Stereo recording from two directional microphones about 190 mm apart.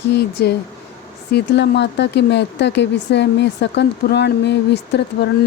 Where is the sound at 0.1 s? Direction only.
60° left (ahead or behind).